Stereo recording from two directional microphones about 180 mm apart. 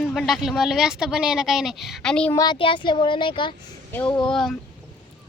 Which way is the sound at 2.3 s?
25° left (ahead or behind).